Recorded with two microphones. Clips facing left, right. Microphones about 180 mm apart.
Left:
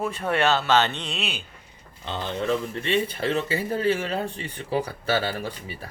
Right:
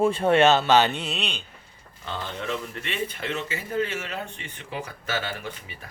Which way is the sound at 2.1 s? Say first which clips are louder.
Left 5 dB; 20° left (ahead or behind).